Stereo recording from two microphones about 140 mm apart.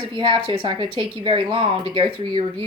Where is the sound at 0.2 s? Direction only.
35° right (ahead or behind).